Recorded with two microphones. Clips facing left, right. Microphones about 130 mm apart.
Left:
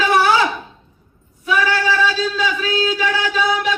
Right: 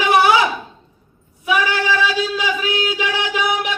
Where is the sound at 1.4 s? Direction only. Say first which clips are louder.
Left 1 dB; 15° right (ahead or behind).